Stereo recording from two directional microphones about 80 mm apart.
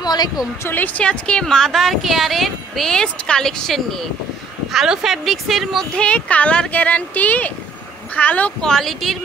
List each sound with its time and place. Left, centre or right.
0.0 s a sound: left
0.7 s a woman's voice: left; by 5.9 s centre
5.9 s speech: centre
8.6 s a woman's voice: centre